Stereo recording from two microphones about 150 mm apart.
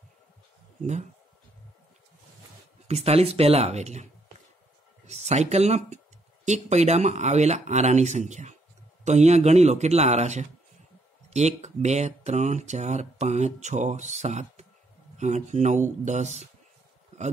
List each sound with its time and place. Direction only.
2.9 s speech: 45° right (ahead or behind)